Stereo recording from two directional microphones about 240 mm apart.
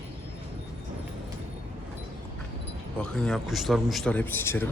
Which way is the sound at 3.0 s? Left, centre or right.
Centre.